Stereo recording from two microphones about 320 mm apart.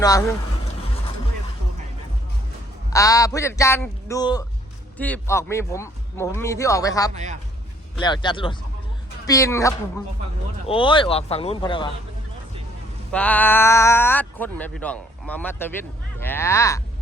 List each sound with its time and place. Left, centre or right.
0.0 s speech: centre
2.9 s speech: centre
7.1 s a man's voice: right
7.9 s speech: centre
13.1 s speech: centre